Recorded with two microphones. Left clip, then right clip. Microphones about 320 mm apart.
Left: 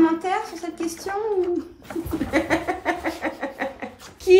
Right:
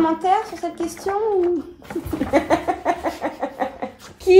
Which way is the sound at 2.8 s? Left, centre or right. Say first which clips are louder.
Right 3 dB; centre.